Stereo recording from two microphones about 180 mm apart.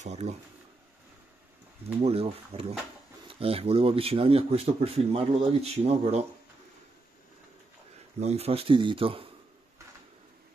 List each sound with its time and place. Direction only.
0.0 s speech: 40° right (ahead or behind)
2.0 s speech: 35° right (ahead or behind)
8.2 s speech: 35° right (ahead or behind)